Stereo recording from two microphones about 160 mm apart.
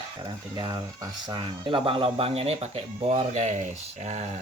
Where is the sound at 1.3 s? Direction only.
30° right (ahead or behind).